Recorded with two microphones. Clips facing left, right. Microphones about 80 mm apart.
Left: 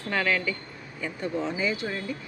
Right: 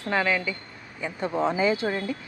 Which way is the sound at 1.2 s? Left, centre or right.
Right.